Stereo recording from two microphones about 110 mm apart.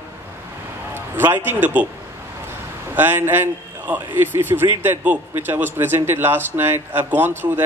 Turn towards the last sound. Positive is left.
turn(degrees=-20)  # may be behind; listen again after turning